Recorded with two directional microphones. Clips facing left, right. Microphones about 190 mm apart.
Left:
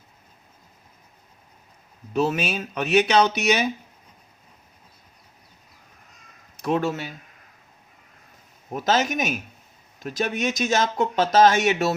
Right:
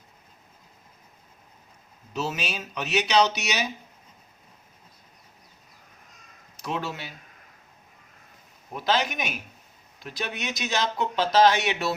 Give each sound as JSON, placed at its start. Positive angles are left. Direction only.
{"t": 2.1, "sound": "speech", "side_deg": 55}
{"t": 6.6, "sound": "speech", "side_deg": 50}
{"t": 8.7, "sound": "speech", "side_deg": 45}